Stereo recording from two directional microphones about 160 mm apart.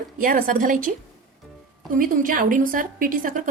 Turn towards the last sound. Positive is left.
turn(degrees=-60)  # may be behind; listen again after turning